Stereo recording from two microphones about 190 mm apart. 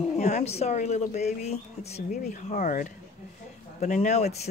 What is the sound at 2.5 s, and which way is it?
Speech, 45° left (ahead or behind).